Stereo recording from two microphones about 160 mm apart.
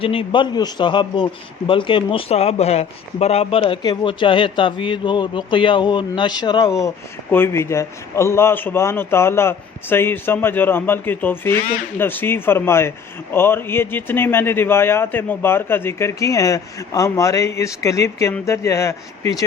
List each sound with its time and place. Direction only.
0.0 s a man's voice: 35° left (ahead or behind)